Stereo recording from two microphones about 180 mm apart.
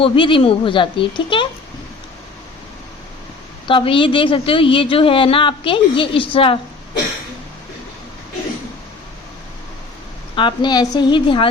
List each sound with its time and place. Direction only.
0.0 s a woman's voice: 30° left (ahead or behind)
3.7 s a woman's voice: 30° left (ahead or behind)
10.3 s a woman's voice: 25° left (ahead or behind)